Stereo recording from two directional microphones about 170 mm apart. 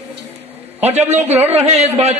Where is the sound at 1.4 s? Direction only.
40° right (ahead or behind).